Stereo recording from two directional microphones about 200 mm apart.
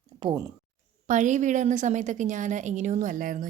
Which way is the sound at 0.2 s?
20° right (ahead or behind).